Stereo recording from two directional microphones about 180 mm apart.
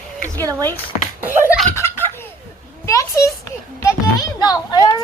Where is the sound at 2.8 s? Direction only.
15° left (ahead or behind).